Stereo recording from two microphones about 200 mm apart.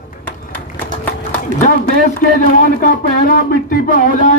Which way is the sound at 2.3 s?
40° left (ahead or behind).